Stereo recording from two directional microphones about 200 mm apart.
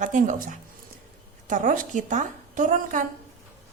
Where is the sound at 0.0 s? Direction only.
40° right (ahead or behind).